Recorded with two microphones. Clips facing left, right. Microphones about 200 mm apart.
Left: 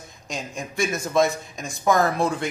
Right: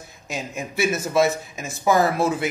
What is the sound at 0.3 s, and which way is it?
Speech, 5° right (ahead or behind).